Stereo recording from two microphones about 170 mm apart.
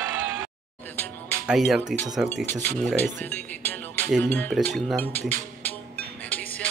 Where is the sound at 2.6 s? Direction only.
10° left (ahead or behind).